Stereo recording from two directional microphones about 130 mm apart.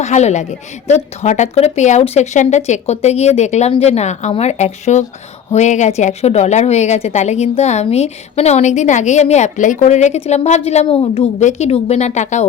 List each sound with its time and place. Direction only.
0.0 s a woman's voice: 60° left (ahead or behind)